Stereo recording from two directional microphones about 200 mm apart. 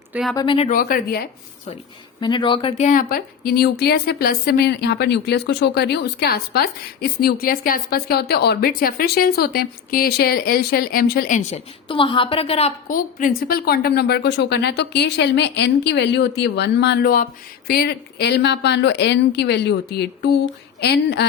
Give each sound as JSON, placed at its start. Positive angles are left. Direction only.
{"t": 0.1, "sound": "speech", "side_deg": 0}
{"t": 0.3, "sound": "speech", "side_deg": 25}
{"t": 0.7, "sound": "speech", "side_deg": 45}
{"t": 2.2, "sound": "speech", "side_deg": 25}